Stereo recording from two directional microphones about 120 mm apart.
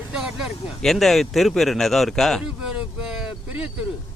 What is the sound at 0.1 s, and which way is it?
Speech, 5° right (ahead or behind).